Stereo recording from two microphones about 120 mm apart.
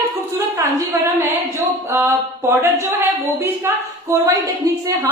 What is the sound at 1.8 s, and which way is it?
A woman's voice, 20° right (ahead or behind).